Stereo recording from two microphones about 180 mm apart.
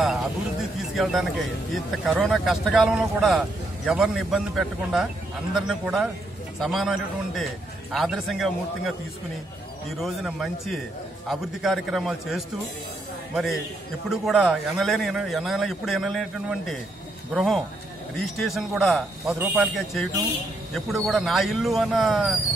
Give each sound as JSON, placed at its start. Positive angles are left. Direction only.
{"t": 0.0, "sound": "a man's voice", "side_deg": 0}
{"t": 9.9, "sound": "a man's voice", "side_deg": 0}